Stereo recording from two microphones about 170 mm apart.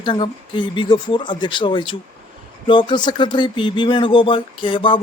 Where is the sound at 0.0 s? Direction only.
30° left (ahead or behind).